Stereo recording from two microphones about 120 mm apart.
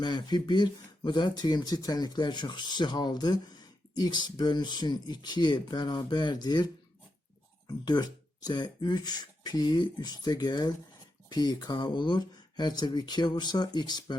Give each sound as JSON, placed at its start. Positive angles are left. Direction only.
{"t": 0.0, "sound": "speech", "side_deg": 35}
{"t": 7.7, "sound": "speech", "side_deg": 35}